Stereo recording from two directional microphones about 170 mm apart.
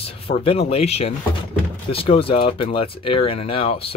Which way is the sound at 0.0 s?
35° left (ahead or behind).